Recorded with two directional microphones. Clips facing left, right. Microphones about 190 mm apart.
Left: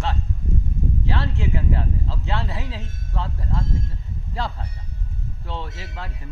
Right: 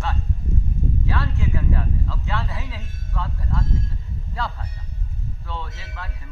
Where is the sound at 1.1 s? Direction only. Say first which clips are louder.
Left 1 dB; 25° left (ahead or behind).